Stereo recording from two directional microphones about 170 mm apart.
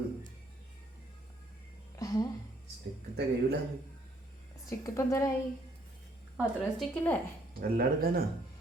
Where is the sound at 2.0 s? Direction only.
20° left (ahead or behind).